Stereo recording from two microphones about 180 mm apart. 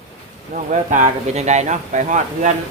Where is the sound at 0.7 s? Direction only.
40° right (ahead or behind).